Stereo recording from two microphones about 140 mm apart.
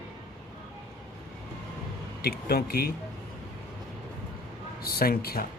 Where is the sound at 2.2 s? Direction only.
90° left.